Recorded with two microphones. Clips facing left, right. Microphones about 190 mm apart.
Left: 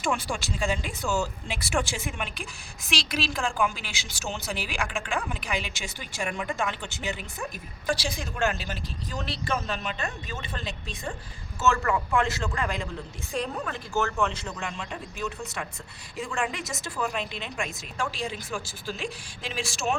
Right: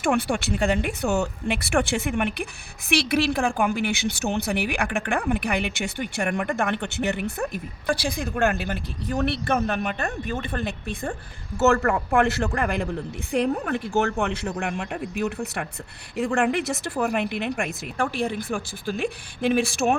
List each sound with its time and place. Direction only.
0.0 s a woman's voice: 60° right (ahead or behind)